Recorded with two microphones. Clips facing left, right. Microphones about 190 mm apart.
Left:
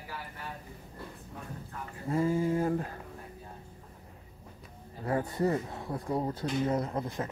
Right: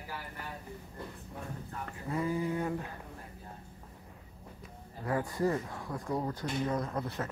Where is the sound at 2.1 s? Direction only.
30° left (ahead or behind).